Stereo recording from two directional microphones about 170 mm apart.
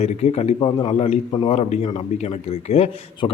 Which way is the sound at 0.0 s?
40° left (ahead or behind).